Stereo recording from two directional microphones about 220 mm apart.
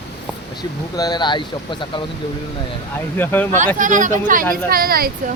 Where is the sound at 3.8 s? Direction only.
35° right (ahead or behind).